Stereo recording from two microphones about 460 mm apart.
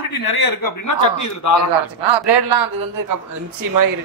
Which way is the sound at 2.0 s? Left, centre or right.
Right.